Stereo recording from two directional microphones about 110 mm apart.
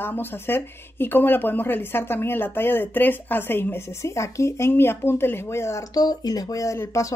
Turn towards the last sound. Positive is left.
turn(degrees=25)  # may be behind; listen again after turning